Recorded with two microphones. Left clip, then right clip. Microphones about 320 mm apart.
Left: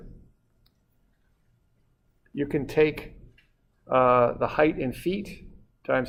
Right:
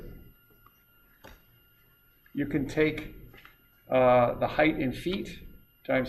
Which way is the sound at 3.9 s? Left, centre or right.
Left.